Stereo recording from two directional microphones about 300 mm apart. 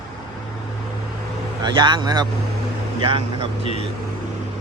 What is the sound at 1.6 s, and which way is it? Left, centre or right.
Speech, centre.